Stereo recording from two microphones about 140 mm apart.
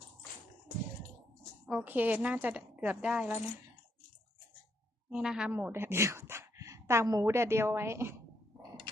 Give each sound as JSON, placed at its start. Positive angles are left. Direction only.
{"t": 1.6, "sound": "a woman's voice", "side_deg": -10}
{"t": 5.1, "sound": "a woman's voice", "side_deg": -5}
{"t": 5.5, "sound": "a woman's voice", "side_deg": -15}